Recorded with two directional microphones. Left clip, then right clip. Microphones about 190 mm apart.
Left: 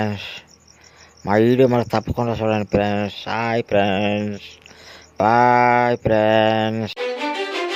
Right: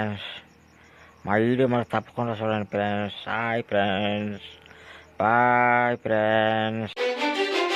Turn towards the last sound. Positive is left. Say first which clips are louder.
# left 1 dB
turn(degrees=0)  # may be behind; listen again after turning